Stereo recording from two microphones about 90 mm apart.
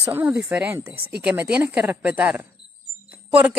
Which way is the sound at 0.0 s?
15° right (ahead or behind).